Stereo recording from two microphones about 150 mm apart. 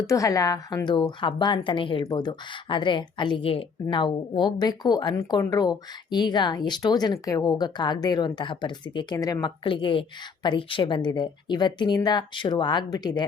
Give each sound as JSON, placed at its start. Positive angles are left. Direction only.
{"t": 0.1, "sound": "a woman's voice", "side_deg": 20}